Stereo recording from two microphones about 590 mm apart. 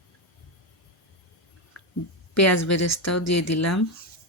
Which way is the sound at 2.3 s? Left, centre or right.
Left.